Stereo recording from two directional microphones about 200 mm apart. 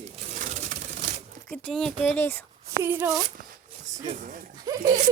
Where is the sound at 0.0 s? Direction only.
40° right (ahead or behind).